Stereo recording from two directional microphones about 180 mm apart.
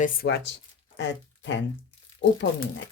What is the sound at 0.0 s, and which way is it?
Speech, 65° left (ahead or behind).